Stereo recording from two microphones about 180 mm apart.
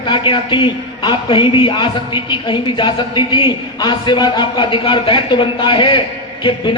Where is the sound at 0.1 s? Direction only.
30° left (ahead or behind).